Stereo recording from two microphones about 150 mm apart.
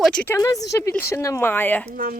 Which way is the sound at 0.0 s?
5° left (ahead or behind).